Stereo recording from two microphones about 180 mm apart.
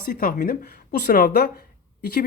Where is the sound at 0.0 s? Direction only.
50° left (ahead or behind).